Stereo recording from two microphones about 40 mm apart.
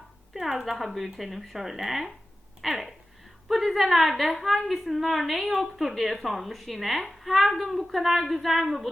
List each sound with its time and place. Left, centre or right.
0.3 s a woman's voice: centre